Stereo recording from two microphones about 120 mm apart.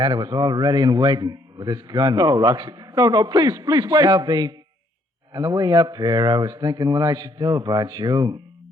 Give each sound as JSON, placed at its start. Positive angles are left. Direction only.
{"t": 0.0, "sound": "a man's voice", "side_deg": -35}